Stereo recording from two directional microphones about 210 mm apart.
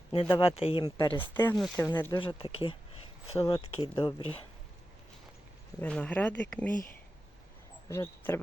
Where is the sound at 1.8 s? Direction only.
15° left (ahead or behind).